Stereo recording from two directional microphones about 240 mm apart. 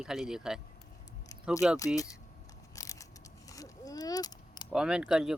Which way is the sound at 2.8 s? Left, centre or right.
Centre.